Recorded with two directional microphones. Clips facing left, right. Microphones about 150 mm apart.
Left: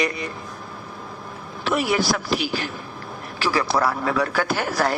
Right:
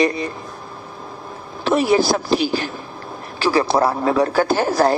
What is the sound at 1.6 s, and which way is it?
A man's voice, 30° right (ahead or behind).